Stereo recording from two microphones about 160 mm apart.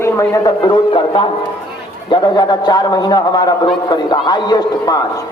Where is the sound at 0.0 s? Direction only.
20° left (ahead or behind).